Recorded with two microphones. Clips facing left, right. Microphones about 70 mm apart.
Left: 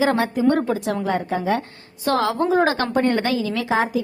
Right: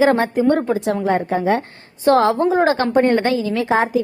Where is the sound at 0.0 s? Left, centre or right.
Right.